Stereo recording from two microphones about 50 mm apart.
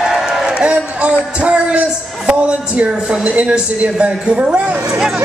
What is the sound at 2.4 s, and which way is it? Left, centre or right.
A woman's voice, right.